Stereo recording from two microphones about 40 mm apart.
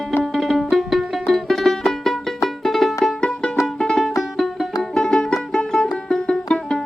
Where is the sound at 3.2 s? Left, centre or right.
Centre.